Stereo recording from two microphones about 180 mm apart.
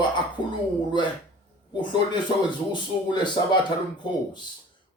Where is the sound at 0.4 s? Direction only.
25° left (ahead or behind).